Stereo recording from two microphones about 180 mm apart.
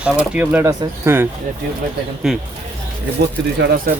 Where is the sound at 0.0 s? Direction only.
10° right (ahead or behind).